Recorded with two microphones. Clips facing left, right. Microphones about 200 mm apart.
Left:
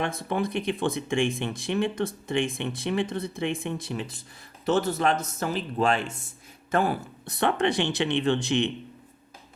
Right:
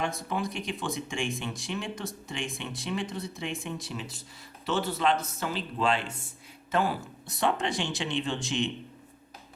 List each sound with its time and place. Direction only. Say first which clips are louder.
0.0 s speech: left 4 dB; 60° left (ahead or behind)